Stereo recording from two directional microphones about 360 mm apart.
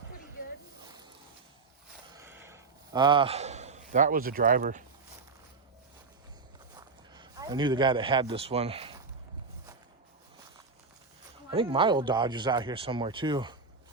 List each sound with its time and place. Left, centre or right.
2.1 s a sound: centre
6.7 s speech: centre
11.5 s speech: centre